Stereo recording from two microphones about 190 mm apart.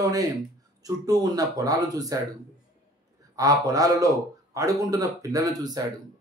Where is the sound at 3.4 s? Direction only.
20° right (ahead or behind).